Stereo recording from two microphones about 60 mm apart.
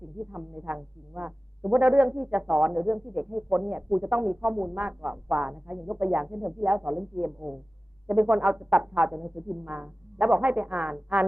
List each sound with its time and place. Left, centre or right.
0.2 s speech: right